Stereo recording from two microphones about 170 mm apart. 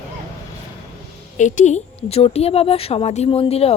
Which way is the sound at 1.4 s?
45° left (ahead or behind).